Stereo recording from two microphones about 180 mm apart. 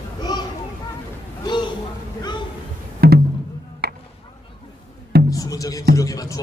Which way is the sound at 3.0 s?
60° right (ahead or behind).